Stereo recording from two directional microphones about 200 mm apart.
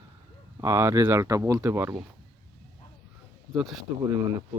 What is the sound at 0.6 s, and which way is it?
Speech, 15° right (ahead or behind).